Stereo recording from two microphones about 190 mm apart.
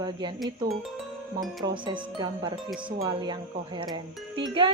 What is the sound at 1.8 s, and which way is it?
A woman's voice, 25° right (ahead or behind).